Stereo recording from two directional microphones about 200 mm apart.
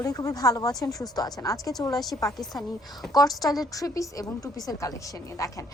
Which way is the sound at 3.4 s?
Centre (ahead or behind).